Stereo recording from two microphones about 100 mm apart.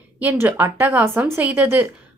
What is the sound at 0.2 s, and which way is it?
Speech, 20° right (ahead or behind).